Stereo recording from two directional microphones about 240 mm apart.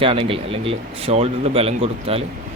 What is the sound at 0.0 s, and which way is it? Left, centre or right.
Speech, right.